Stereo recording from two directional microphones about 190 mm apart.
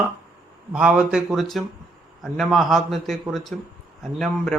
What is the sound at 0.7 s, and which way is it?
Speech, 5° right (ahead or behind).